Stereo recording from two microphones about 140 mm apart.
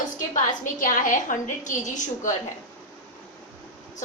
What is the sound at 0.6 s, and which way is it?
A woman's voice, 70° left (ahead or behind).